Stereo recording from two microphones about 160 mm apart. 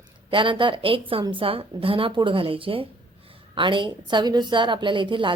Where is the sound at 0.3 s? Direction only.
30° right (ahead or behind).